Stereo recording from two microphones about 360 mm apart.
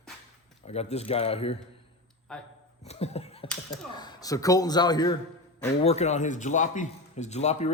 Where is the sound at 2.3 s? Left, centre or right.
Centre.